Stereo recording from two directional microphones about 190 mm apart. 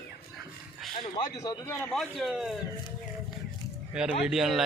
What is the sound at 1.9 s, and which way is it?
Speech, centre (ahead or behind).